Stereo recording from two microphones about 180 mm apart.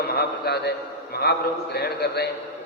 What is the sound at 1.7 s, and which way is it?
Speech, 60° left (ahead or behind).